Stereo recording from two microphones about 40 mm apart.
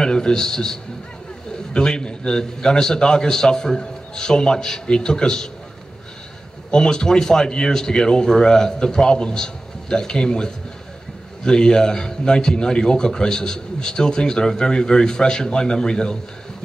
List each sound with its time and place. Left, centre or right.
0.0 s a man's voice: centre
6.7 s a man's voice: centre